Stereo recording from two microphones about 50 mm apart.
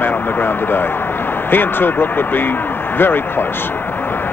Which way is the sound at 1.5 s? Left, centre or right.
Left.